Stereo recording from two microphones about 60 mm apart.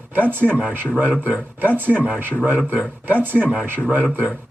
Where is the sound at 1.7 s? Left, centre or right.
Right.